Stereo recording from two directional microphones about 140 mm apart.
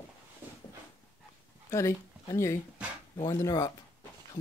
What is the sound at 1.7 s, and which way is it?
Speech, 20° left (ahead or behind).